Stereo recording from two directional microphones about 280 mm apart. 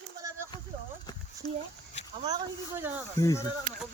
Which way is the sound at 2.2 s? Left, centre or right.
Centre.